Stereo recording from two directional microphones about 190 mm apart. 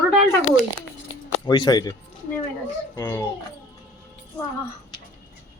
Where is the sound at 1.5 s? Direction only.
20° left (ahead or behind).